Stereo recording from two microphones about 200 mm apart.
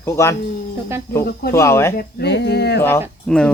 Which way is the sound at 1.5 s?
15° left (ahead or behind).